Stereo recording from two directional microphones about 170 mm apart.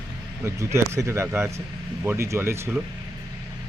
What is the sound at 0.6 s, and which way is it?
Speech, 15° right (ahead or behind).